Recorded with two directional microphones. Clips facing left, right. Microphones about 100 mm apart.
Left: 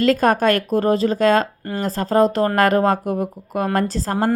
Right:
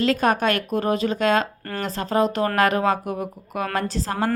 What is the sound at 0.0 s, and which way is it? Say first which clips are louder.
Speech: left 4 dB; 45° left (ahead or behind).